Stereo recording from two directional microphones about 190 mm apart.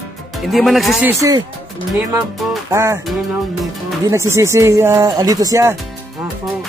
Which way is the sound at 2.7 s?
15° right (ahead or behind).